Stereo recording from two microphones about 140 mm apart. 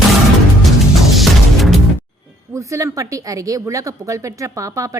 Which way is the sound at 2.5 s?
20° right (ahead or behind).